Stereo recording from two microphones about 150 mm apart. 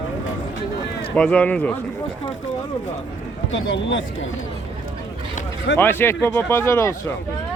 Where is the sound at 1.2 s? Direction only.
10° left (ahead or behind).